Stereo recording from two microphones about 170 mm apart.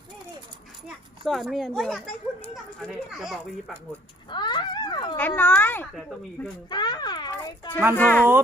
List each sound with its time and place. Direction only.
0.9 s a child's voice: centre (ahead or behind)
4.3 s speech: 25° left (ahead or behind)
5.4 s speech: 10° left (ahead or behind)
6.7 s a sound: 25° left (ahead or behind)
7.9 s speech: 10° left (ahead or behind)